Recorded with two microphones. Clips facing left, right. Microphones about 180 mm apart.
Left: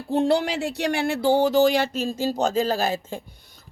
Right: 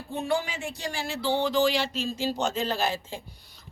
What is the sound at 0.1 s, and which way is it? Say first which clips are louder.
Speech: left 8 dB; 75° left (ahead or behind).